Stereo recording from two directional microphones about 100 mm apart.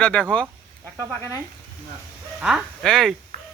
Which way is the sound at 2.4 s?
5° right (ahead or behind).